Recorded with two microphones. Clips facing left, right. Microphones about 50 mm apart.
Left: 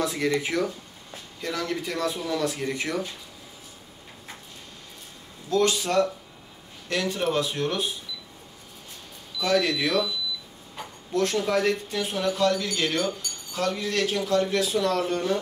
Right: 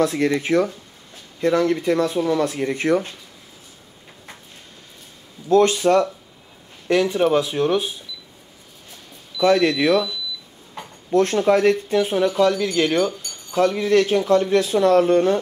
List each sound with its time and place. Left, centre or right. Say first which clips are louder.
0.0 s speech: right 6 dB; right
5.5 s speech: right 8 dB; right
6.9 s speech: right 9 dB; right
9.4 s speech: right 7 dB; right
11.1 s speech: right 7 dB; right